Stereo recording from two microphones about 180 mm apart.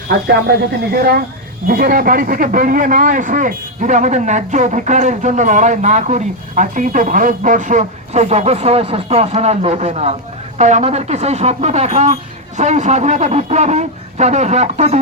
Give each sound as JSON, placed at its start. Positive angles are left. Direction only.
{"t": 0.1, "sound": "a man's voice", "side_deg": -60}